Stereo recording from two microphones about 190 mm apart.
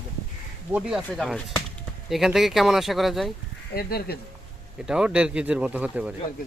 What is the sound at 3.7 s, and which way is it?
Speech, 55° left (ahead or behind).